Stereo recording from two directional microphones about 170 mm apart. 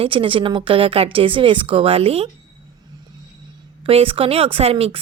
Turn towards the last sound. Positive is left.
turn(degrees=-35)  # may be behind; listen again after turning